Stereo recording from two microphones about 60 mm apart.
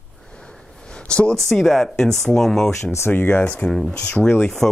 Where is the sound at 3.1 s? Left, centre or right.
Left.